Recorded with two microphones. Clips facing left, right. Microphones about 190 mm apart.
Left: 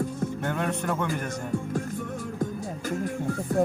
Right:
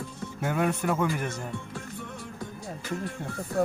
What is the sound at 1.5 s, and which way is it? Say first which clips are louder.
Music: left 8 dB; 45° left (ahead or behind).